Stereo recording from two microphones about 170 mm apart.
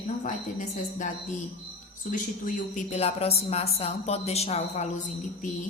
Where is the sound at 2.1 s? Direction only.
50° left (ahead or behind).